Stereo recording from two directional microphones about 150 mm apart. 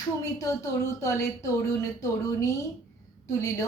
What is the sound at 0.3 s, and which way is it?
Speech, 20° left (ahead or behind).